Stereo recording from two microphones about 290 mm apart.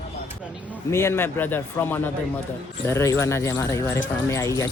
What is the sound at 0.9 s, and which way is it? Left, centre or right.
Speech, centre.